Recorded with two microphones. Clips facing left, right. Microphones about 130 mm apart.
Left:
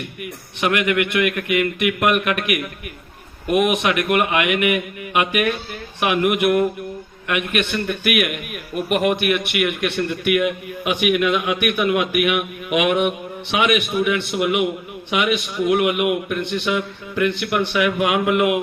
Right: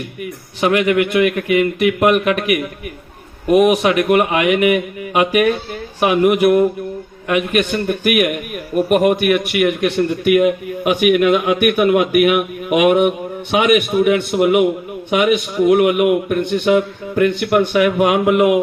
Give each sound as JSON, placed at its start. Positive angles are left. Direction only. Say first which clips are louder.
{"t": 0.6, "sound": "a man's voice", "louder": "right 5 dB", "side_deg": -30}